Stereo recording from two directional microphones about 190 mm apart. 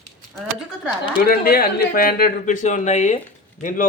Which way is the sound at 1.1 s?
50° left (ahead or behind).